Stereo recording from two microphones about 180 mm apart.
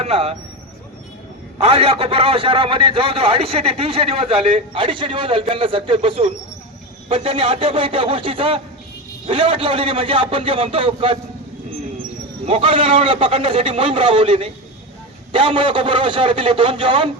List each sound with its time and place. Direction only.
0.0 s speech: 35° right (ahead or behind)
1.6 s a man's voice: 35° right (ahead or behind)
12.5 s a man's voice: 30° right (ahead or behind)